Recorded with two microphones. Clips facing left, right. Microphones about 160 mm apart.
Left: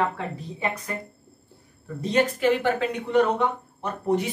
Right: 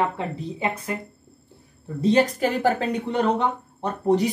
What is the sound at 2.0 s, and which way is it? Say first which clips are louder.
Speech: right 2 dB; 35° right (ahead or behind).